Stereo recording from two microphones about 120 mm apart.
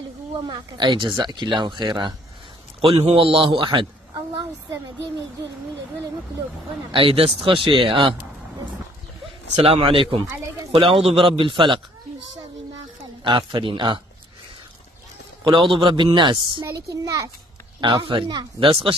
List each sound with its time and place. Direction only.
0.4 s speech: 40° right (ahead or behind)
2.8 s a man's voice: 55° right (ahead or behind)
6.9 s a man's voice: 50° right (ahead or behind)
9.6 s a man's voice: 50° right (ahead or behind)
10.2 s speech: 20° right (ahead or behind)
10.7 s a man's voice: 50° right (ahead or behind)
13.2 s speech: 40° right (ahead or behind)
15.7 s a man's voice: 45° right (ahead or behind)
16.6 s speech: 30° right (ahead or behind)
17.7 s a man's voice: 40° right (ahead or behind)